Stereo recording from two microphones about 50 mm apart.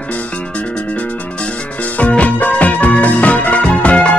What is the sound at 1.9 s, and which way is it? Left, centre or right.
Music, left.